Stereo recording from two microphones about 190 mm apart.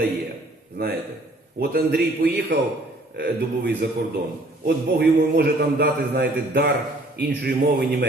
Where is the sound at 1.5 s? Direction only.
55° right (ahead or behind).